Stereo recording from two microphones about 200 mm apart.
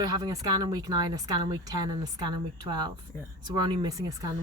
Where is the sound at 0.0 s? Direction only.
20° right (ahead or behind).